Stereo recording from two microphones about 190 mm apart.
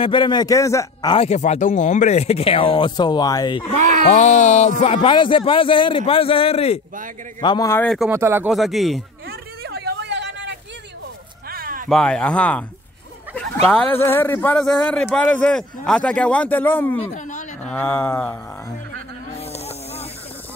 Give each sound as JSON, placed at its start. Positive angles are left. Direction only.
{"t": 0.0, "sound": "speech", "side_deg": 25}
{"t": 1.1, "sound": "speech", "side_deg": 35}
{"t": 3.7, "sound": "a sound", "side_deg": -40}
{"t": 4.1, "sound": "speech", "side_deg": 35}
{"t": 7.3, "sound": "a man's voice", "side_deg": 20}
{"t": 8.1, "sound": "speech", "side_deg": -15}
{"t": 8.5, "sound": "speech", "side_deg": 0}
{"t": 9.3, "sound": "a sound", "side_deg": -60}
{"t": 11.4, "sound": "a sound", "side_deg": -50}
{"t": 11.9, "sound": "speech", "side_deg": 5}
{"t": 13.7, "sound": "a man's voice", "side_deg": 10}
{"t": 17.0, "sound": "speech", "side_deg": 40}
{"t": 17.6, "sound": "a man's voice", "side_deg": 10}
{"t": 19.3, "sound": "snake", "side_deg": 35}